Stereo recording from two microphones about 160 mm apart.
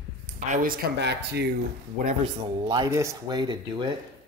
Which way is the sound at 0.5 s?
60° right (ahead or behind).